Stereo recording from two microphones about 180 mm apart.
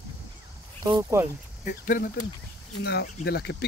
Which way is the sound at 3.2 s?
65° left (ahead or behind).